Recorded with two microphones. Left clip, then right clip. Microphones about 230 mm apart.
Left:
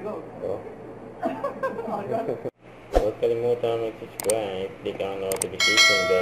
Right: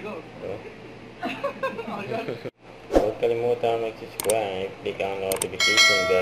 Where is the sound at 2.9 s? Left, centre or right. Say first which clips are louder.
Right 1 dB; centre.